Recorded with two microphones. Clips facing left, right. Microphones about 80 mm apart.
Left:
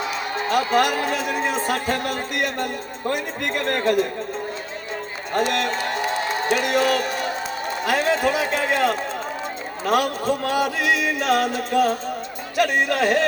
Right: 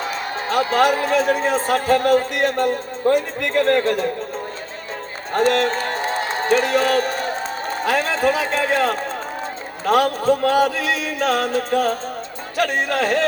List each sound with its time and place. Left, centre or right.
0.0 s speech: right
5.3 s a man's voice: right